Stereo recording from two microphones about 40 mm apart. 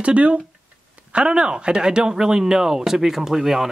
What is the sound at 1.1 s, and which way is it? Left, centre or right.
Speech, right.